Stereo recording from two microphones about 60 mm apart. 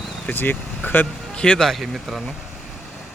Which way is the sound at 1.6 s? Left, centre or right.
Centre.